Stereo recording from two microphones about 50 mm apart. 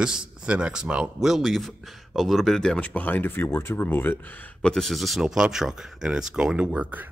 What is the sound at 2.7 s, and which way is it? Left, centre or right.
Speech, left.